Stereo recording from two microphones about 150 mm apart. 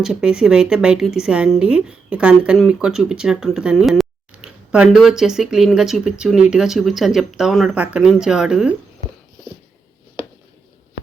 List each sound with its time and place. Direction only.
0.0 s speech: 5° right (ahead or behind)